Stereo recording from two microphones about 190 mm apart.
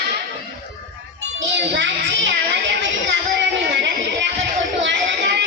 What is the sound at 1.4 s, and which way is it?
Child singing, 70° right (ahead or behind).